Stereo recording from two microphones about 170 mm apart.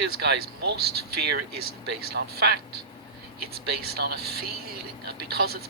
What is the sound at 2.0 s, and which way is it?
Speech, 70° right (ahead or behind).